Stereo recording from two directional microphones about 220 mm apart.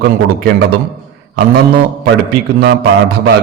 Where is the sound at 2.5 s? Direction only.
45° right (ahead or behind).